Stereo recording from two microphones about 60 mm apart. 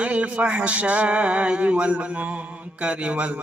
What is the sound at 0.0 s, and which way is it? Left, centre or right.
Mantra, right.